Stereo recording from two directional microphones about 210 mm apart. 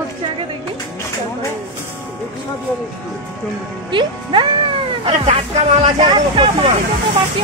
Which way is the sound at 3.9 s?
25° right (ahead or behind).